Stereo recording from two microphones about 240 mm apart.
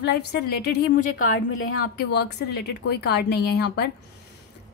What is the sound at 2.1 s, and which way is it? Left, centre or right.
A woman's voice, left.